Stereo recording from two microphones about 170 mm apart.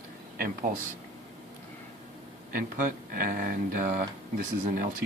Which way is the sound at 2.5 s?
55° right (ahead or behind).